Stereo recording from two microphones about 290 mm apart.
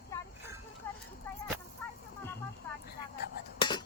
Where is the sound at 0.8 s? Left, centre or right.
Centre.